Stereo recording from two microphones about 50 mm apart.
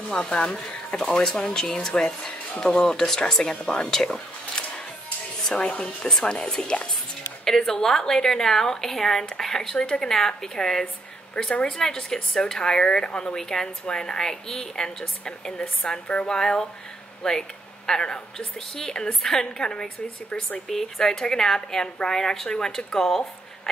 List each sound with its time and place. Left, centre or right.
0.1 s speech: centre
6.0 s speech: centre
16.1 s speech: left
16.3 s speech: centre